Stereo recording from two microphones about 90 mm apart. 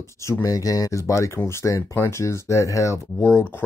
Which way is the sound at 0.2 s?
35° left (ahead or behind).